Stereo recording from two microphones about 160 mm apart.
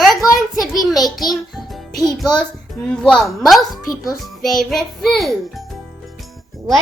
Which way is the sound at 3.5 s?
Centre (ahead or behind).